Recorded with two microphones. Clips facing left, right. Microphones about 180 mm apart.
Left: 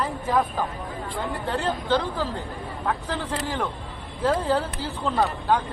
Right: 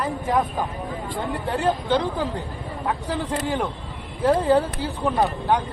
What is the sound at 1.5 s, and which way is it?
Speech, 15° right (ahead or behind).